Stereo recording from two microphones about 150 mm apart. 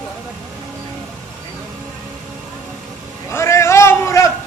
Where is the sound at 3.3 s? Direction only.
20° left (ahead or behind).